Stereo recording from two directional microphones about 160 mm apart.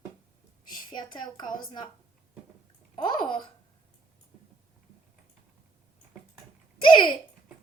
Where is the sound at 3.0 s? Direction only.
30° left (ahead or behind).